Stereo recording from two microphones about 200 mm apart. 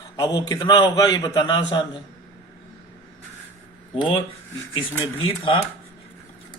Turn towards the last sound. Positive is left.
turn(degrees=25)  # may be behind; listen again after turning